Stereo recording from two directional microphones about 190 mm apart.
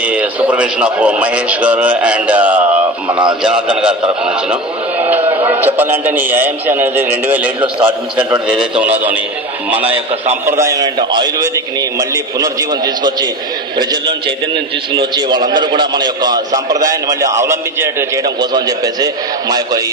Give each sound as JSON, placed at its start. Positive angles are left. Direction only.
{"t": 0.0, "sound": "a man's voice", "side_deg": -5}
{"t": 3.1, "sound": "a man's voice", "side_deg": -25}
{"t": 3.4, "sound": "a man's voice", "side_deg": -5}
{"t": 5.4, "sound": "a man's voice", "side_deg": -10}
{"t": 10.4, "sound": "a man's voice", "side_deg": -15}
{"t": 15.0, "sound": "a man's voice", "side_deg": -25}